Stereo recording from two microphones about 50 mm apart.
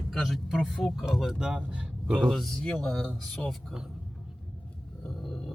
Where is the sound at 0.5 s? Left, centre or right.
Centre.